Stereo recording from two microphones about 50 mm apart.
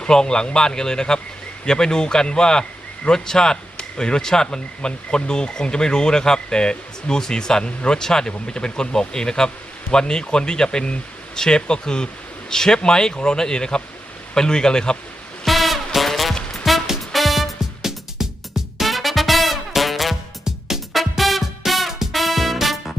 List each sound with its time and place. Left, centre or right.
0.0 s a man's voice: centre
15.4 s music: centre